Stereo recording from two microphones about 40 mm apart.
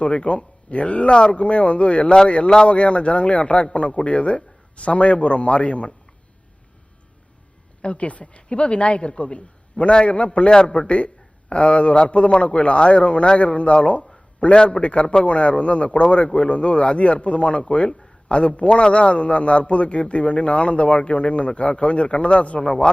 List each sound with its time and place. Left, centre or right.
0.0 s a man's voice: left
7.8 s a woman's voice: left